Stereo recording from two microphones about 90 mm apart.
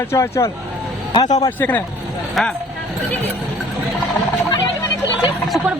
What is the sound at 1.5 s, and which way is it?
Speech, 20° left (ahead or behind).